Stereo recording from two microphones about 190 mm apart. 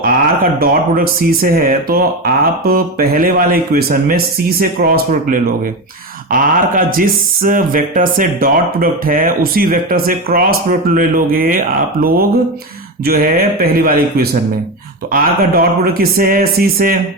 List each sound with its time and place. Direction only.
0.6 s speech: 50° right (ahead or behind)